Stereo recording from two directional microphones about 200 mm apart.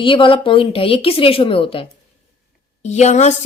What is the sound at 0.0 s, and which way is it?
A woman's voice, 25° left (ahead or behind).